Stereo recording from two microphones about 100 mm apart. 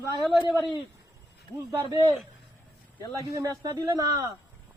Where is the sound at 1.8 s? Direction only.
40° right (ahead or behind).